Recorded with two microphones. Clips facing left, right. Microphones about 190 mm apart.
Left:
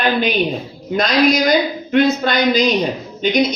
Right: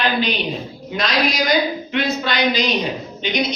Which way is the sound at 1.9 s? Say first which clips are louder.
Left 9 dB; 50° left (ahead or behind).